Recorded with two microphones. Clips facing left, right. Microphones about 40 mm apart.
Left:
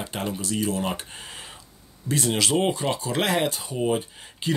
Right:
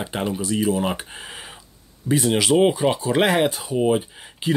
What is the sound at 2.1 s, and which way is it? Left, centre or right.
Speech, centre.